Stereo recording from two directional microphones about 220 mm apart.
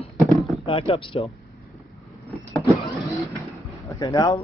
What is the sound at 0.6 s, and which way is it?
Speech, 25° left (ahead or behind).